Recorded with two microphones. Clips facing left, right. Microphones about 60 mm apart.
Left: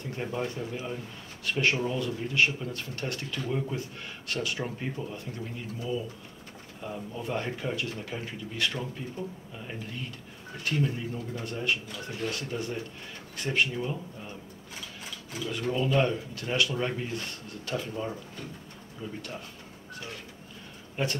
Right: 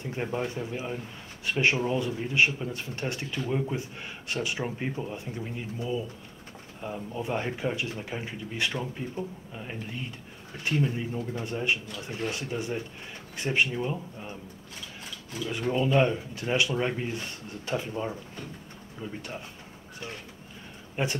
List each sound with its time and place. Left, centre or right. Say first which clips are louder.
0.1 s speech: right 2 dB; right
10.6 s speech: right 2 dB; right
15.5 s speech: right 2 dB; centre
20.9 s speech: right 1 dB; centre